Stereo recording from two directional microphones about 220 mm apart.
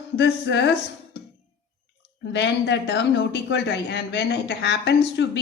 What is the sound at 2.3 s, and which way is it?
Speech, 55° left (ahead or behind).